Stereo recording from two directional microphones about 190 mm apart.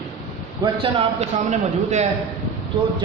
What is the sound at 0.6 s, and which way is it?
A man's voice, 30° right (ahead or behind).